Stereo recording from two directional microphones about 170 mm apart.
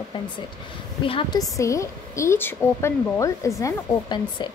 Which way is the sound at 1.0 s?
30° left (ahead or behind).